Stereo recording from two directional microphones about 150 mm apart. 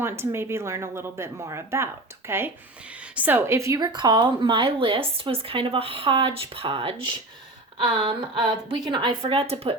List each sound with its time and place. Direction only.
0.0 s speech: 15° right (ahead or behind); by 9.7 s 40° right (ahead or behind)